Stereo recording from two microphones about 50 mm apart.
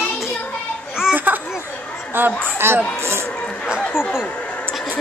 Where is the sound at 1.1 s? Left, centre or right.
Right.